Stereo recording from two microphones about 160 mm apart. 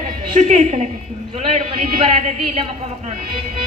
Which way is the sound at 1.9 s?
40° right (ahead or behind).